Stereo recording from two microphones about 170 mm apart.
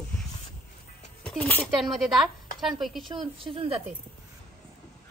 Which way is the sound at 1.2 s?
10° left (ahead or behind).